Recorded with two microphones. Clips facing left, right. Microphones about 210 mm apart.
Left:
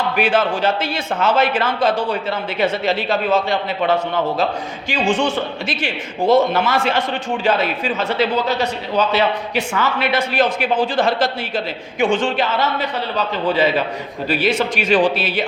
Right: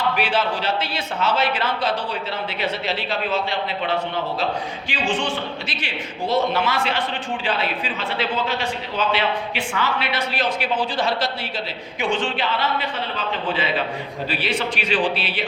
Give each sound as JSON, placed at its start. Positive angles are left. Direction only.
{"t": 0.2, "sound": "a man's voice", "side_deg": 50}